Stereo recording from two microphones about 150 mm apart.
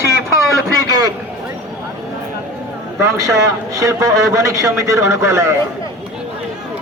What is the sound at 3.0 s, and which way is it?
A man's voice, 20° right (ahead or behind).